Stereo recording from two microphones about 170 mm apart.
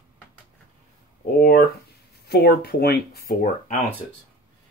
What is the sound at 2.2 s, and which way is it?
Speech, 70° left (ahead or behind).